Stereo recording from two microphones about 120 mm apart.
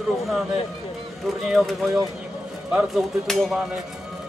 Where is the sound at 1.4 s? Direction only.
Centre (ahead or behind).